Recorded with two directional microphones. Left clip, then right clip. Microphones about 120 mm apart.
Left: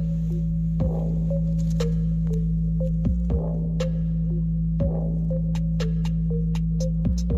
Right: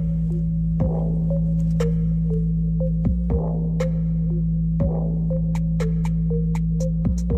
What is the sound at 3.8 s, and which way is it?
Music, 45° right (ahead or behind).